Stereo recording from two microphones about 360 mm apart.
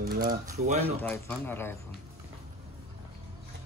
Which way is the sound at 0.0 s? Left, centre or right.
Right.